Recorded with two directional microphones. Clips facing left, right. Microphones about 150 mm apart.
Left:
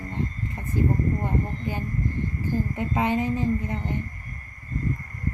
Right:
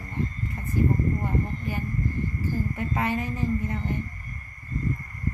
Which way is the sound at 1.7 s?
20° left (ahead or behind).